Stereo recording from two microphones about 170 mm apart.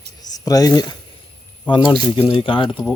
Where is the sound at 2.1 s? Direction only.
30° left (ahead or behind).